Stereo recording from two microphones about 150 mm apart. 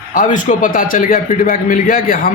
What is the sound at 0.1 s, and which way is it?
A man's voice, 60° left (ahead or behind).